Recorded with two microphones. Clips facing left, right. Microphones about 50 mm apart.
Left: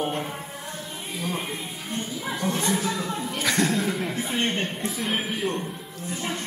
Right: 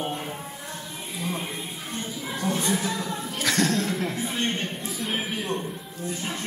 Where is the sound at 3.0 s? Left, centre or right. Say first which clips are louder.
Left 2 dB; centre.